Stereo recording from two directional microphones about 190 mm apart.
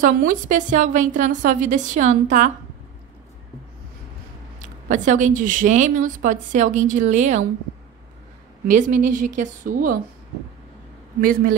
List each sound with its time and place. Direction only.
0.0 s speech: 45° right (ahead or behind)
4.6 s speech: 40° right (ahead or behind)
8.6 s a woman's voice: 40° right (ahead or behind)
11.1 s a woman's voice: 50° right (ahead or behind)